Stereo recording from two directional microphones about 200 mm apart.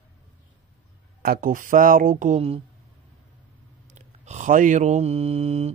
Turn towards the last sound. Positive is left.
turn(degrees=-30)  # may be behind; listen again after turning